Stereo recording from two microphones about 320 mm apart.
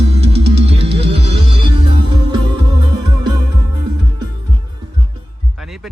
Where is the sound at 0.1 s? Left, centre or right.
Centre.